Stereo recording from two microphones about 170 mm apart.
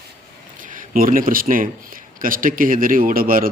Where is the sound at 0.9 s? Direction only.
55° right (ahead or behind).